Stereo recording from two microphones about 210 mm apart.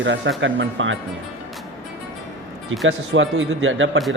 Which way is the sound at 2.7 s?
65° right (ahead or behind).